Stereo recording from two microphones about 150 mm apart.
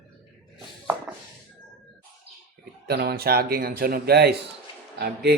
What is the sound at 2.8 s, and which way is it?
A man's voice, 90° right.